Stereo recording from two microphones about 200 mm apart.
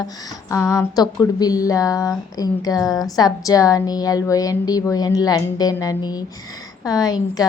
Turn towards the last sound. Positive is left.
turn(degrees=20)  # may be behind; listen again after turning